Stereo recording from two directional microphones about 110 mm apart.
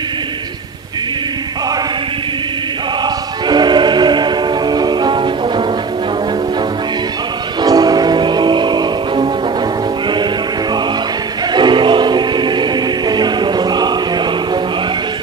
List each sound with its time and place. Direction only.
3.4 s music: 40° right (ahead or behind)
7.6 s music: 35° right (ahead or behind)
11.5 s music: 45° right (ahead or behind)